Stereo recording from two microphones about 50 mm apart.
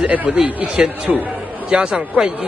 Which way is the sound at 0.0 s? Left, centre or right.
Right.